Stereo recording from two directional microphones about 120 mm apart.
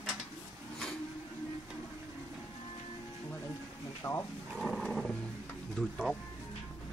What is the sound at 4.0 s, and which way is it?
Speech, 25° left (ahead or behind).